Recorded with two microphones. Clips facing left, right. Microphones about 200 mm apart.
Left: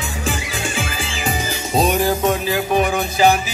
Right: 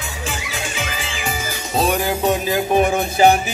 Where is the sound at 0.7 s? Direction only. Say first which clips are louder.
Left 2 dB; 45° left (ahead or behind).